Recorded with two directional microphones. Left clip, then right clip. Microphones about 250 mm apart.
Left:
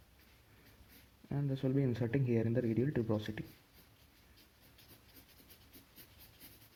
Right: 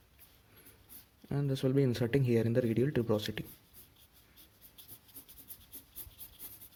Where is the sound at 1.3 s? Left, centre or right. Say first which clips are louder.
Right 4 dB; right.